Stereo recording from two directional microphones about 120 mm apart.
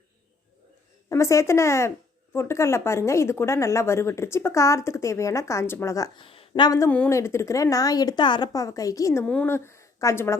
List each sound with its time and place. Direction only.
1.1 s speech: 25° left (ahead or behind)
6.1 s a sound: 50° left (ahead or behind)
6.5 s speech: 30° left (ahead or behind)
9.2 s speech: 10° left (ahead or behind)
9.5 s a woman's voice: 20° left (ahead or behind)